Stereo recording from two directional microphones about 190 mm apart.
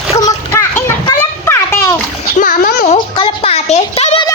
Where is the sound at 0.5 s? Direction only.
15° left (ahead or behind).